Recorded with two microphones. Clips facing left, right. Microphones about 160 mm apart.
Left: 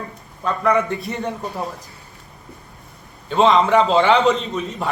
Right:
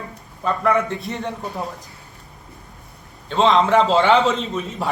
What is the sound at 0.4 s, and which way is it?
A man's voice, centre (ahead or behind).